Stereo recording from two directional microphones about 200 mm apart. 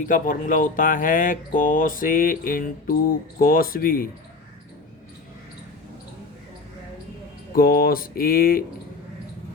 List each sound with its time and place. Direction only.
0.0 s speech: 40° left (ahead or behind)
7.5 s speech: 50° left (ahead or behind)